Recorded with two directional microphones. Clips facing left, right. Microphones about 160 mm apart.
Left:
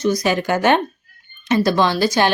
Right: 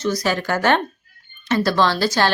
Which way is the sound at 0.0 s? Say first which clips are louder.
Left 3 dB; 15° left (ahead or behind).